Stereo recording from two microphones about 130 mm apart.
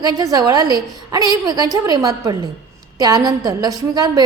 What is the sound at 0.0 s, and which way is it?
A woman's voice, 30° right (ahead or behind).